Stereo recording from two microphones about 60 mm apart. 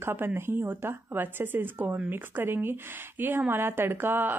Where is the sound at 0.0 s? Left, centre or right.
Right.